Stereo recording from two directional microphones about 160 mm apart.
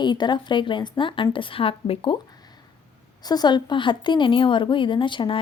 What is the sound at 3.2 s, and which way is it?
A woman's voice, 25° left (ahead or behind).